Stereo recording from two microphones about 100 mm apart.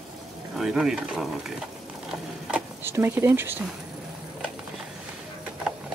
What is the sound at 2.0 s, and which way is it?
Mechanisms, 5° right (ahead or behind).